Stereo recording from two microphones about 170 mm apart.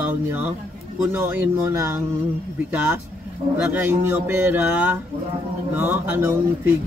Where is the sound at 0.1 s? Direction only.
10° right (ahead or behind).